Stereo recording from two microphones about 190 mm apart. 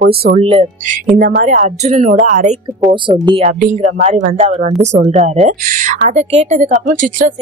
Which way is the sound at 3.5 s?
40° right (ahead or behind).